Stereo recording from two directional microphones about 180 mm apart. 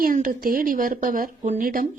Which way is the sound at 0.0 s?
50° right (ahead or behind).